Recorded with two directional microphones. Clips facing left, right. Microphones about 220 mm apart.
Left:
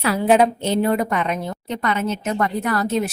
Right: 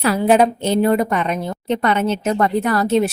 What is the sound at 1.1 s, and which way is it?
Speech, 30° right (ahead or behind).